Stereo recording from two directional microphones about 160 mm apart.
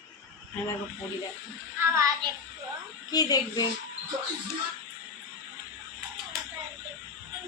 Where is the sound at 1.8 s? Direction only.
15° right (ahead or behind).